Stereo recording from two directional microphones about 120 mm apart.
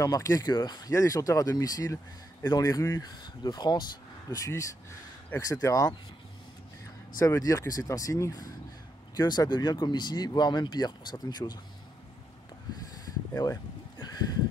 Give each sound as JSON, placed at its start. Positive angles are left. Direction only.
{"t": 0.0, "sound": "speech", "side_deg": 30}
{"t": 7.2, "sound": "speech", "side_deg": 30}
{"t": 12.9, "sound": "a sound", "side_deg": 30}